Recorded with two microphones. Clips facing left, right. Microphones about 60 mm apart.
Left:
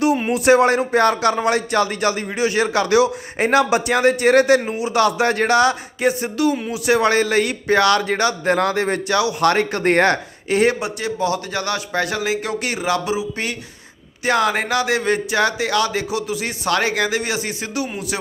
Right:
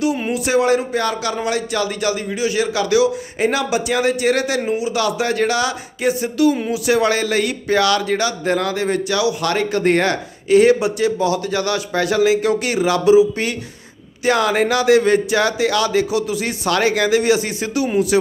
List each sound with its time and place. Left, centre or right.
0.1 s speech: centre
0.3 s a man's voice: left
18.1 s speech: centre